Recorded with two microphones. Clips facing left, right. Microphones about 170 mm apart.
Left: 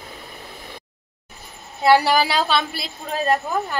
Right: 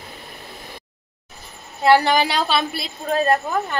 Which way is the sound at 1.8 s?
10° left (ahead or behind).